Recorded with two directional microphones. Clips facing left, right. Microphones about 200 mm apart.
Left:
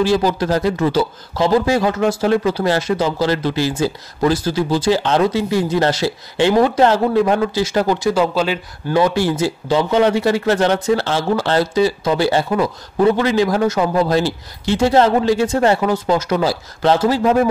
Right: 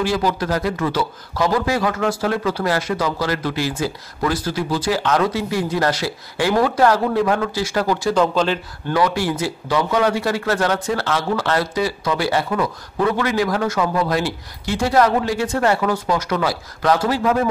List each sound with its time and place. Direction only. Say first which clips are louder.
0.0 s speech: left 4 dB; 30° left (ahead or behind)
8.1 s speech: left 1 dB; 10° left (ahead or behind)
8.9 s speech: left 4 dB; 25° left (ahead or behind)